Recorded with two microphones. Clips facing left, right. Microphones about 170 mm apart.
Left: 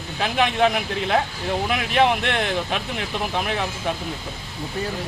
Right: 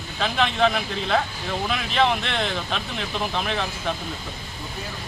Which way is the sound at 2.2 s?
55° left (ahead or behind).